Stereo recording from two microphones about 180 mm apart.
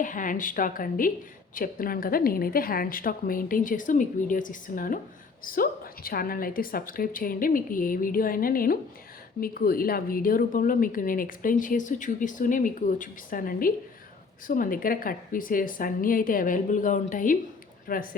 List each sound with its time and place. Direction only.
0.0 s speech: 45° left (ahead or behind)